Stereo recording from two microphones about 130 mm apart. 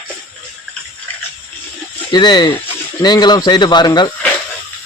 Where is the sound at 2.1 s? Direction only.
35° left (ahead or behind).